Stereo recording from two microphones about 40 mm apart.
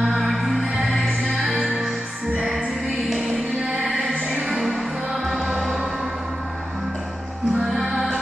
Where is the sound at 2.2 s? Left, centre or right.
Right.